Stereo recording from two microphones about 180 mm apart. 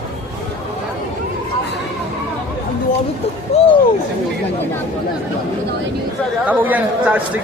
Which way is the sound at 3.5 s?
35° left (ahead or behind).